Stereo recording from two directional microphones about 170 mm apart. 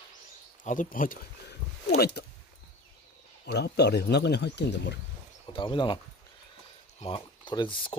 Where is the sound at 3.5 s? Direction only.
75° left (ahead or behind).